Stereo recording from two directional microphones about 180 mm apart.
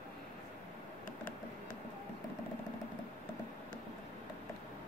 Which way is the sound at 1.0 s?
50° left (ahead or behind).